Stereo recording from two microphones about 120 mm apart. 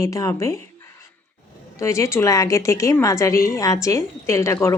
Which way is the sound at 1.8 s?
25° left (ahead or behind).